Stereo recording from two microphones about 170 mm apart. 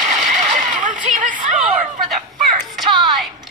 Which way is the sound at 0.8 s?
50° right (ahead or behind).